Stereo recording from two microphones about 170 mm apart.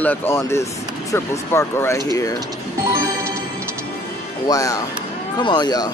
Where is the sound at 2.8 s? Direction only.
20° right (ahead or behind).